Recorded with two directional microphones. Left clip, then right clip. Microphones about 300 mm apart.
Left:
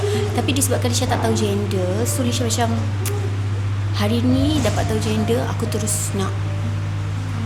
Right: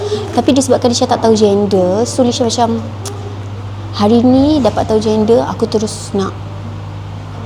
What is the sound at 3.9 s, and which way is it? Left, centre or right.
Speech, right.